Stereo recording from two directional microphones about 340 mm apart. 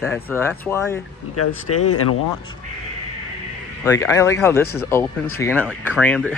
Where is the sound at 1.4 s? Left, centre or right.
Left.